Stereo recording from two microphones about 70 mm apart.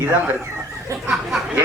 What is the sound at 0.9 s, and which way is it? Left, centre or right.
Speech, right.